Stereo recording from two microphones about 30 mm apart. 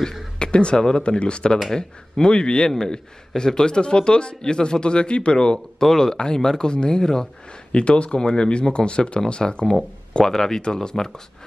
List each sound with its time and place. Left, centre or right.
0.4 s a man's voice: left
2.7 s a man's voice: left
5.8 s speech: centre
7.7 s a man's voice: left
10.2 s speech: centre